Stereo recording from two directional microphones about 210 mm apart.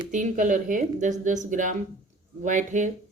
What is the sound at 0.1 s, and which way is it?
Speech, 35° right (ahead or behind).